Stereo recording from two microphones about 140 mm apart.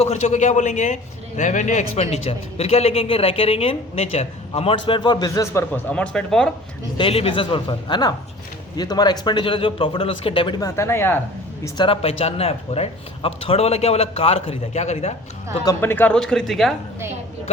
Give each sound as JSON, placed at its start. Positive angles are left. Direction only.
{"t": 0.0, "sound": "a man's voice", "side_deg": 55}
{"t": 5.9, "sound": "speech", "side_deg": 5}
{"t": 6.9, "sound": "a man's voice", "side_deg": 40}
{"t": 11.8, "sound": "a man's voice", "side_deg": 40}
{"t": 15.6, "sound": "speech", "side_deg": 15}